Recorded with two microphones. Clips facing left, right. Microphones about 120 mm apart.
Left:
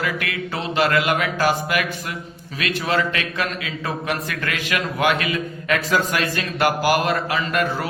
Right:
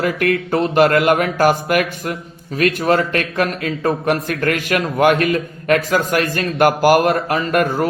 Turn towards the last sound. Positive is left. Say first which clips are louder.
# right 5 dB
turn(degrees=-50)  # may be behind; listen again after turning